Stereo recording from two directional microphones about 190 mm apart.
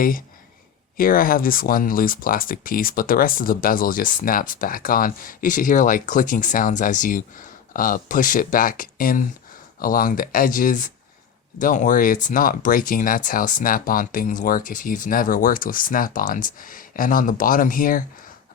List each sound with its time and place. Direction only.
0.9 s speech: 50° left (ahead or behind)